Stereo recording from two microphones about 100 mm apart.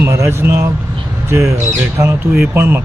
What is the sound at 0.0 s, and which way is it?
Speech, 25° right (ahead or behind).